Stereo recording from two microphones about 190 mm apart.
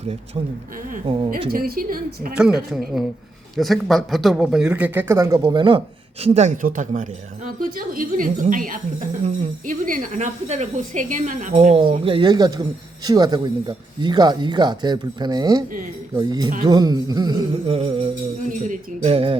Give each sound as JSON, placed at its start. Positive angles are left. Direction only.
{"t": 1.0, "sound": "speech", "side_deg": -30}
{"t": 1.5, "sound": "a woman's voice", "side_deg": -50}
{"t": 2.3, "sound": "a man's voice", "side_deg": -5}
{"t": 6.2, "sound": "a woman's voice", "side_deg": -35}
{"t": 17.7, "sound": "speech", "side_deg": -30}